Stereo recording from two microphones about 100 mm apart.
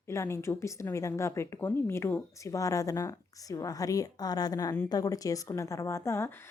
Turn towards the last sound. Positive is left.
turn(degrees=30)  # may be behind; listen again after turning